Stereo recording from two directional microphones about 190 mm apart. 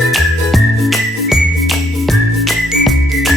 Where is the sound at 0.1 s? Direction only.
Centre (ahead or behind).